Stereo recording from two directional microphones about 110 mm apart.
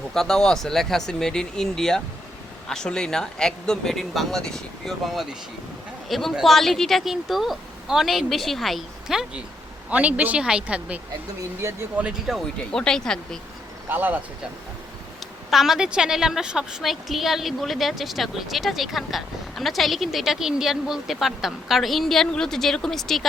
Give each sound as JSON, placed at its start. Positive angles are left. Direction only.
{"t": 0.1, "sound": "a woman's voice", "side_deg": 5}
{"t": 11.6, "sound": "speech", "side_deg": -30}
{"t": 11.9, "sound": "a woman's voice", "side_deg": -10}
{"t": 12.7, "sound": "speech", "side_deg": 5}
{"t": 13.8, "sound": "a woman's voice", "side_deg": -15}
{"t": 15.4, "sound": "a woman's voice", "side_deg": -5}